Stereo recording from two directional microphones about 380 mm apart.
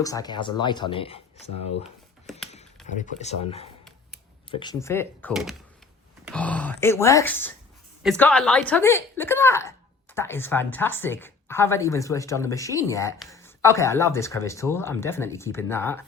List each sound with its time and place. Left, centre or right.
0.0 s speech: centre
2.5 s a woman's voice: centre